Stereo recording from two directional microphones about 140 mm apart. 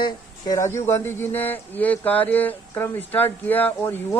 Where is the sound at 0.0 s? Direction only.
25° left (ahead or behind).